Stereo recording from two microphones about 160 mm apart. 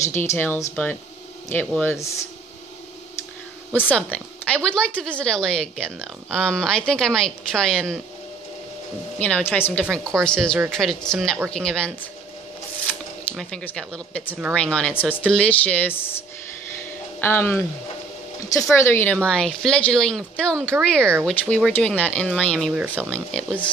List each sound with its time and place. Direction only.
0.0 s speech: 15° left (ahead or behind)
3.9 s speech: 10° left (ahead or behind)
9.2 s speech: 10° left (ahead or behind)
13.4 s speech: 5° left (ahead or behind)
17.2 s speech: 15° left (ahead or behind)
19.2 s speech: 5° left (ahead or behind)